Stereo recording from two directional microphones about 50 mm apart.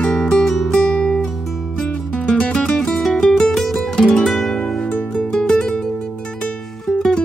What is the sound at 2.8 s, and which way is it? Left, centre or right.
Music, centre.